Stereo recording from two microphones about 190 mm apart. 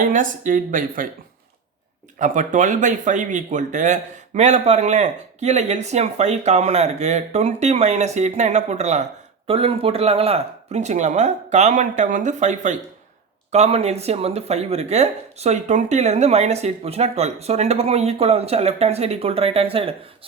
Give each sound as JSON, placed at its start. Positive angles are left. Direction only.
{"t": 0.0, "sound": "speech", "side_deg": -45}
{"t": 2.1, "sound": "speech", "side_deg": -40}